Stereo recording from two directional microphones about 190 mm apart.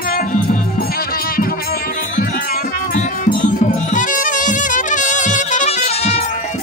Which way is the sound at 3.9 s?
45° left (ahead or behind).